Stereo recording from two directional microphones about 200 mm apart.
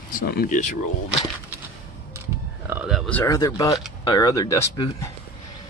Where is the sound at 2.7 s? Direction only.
5° right (ahead or behind).